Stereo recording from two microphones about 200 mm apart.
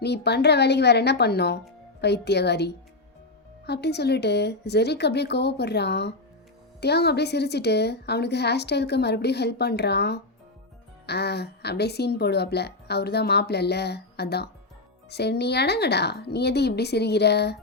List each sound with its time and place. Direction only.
0.0 s speech: 55° left (ahead or behind)